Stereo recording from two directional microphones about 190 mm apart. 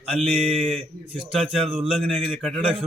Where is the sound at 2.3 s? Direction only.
Centre (ahead or behind).